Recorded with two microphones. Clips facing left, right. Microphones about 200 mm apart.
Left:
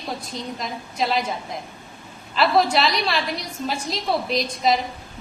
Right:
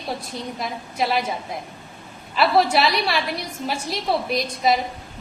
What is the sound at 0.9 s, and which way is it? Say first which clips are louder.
Speech: right 1 dB; 5° right (ahead or behind).